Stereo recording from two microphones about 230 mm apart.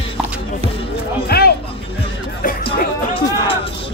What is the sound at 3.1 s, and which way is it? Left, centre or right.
Music, left.